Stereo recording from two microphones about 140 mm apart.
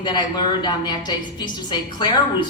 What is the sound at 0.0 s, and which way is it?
A woman's voice, 30° left (ahead or behind).